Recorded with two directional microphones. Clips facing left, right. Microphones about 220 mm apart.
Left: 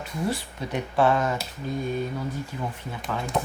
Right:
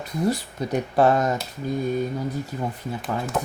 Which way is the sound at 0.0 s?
40° right (ahead or behind).